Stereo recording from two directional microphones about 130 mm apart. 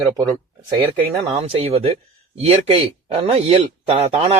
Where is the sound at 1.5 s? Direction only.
50° right (ahead or behind).